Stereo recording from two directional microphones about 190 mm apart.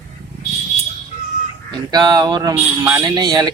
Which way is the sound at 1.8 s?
20° right (ahead or behind).